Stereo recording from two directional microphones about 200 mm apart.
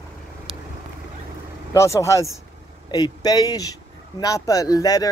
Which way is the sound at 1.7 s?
15° left (ahead or behind).